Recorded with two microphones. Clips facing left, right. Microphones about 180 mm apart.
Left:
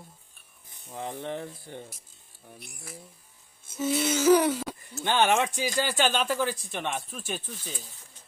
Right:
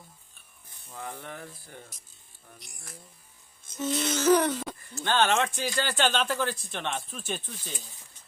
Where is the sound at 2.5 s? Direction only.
60° left (ahead or behind).